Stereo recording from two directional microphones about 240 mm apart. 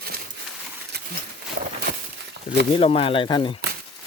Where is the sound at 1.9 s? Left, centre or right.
Right.